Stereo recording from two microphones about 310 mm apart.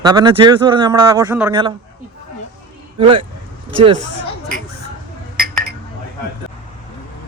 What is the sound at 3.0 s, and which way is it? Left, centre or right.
Speech, centre.